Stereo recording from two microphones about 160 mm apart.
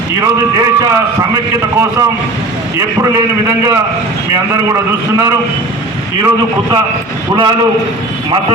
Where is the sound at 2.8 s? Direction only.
20° right (ahead or behind).